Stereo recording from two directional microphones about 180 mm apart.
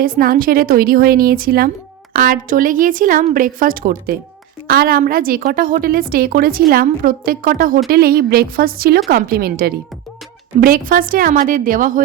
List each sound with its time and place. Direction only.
0.0 s a woman's voice: 55° right (ahead or behind)